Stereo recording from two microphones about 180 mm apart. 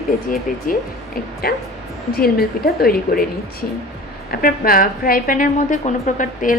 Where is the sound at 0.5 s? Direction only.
50° left (ahead or behind).